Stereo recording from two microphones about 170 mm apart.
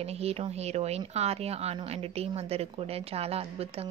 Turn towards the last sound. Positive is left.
turn(degrees=-35)  # may be behind; listen again after turning